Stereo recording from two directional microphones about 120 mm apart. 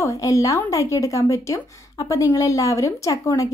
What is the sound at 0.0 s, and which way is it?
Speech, 25° left (ahead or behind).